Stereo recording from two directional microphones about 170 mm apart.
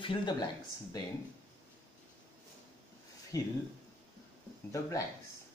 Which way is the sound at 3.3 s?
20° left (ahead or behind).